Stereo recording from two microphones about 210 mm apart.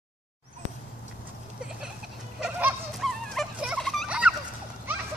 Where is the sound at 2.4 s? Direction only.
5° right (ahead or behind).